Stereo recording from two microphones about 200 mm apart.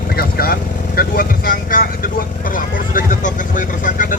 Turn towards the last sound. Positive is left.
turn(degrees=40)  # may be behind; listen again after turning